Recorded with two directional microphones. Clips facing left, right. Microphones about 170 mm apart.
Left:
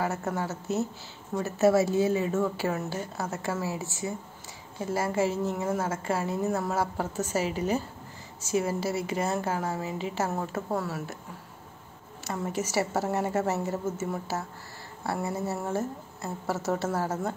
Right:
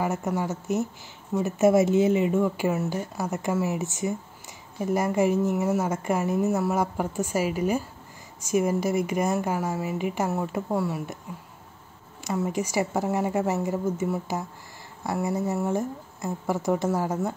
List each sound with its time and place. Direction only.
0.0 s a woman's voice: 15° right (ahead or behind)
12.3 s a woman's voice: 15° right (ahead or behind)